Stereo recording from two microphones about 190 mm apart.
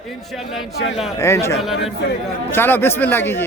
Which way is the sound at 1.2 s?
15° left (ahead or behind).